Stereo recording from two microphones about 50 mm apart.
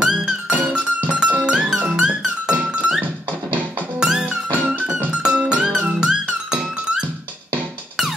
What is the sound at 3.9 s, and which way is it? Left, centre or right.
Music, centre.